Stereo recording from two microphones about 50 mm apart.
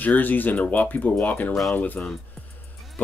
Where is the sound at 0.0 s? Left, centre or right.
Left.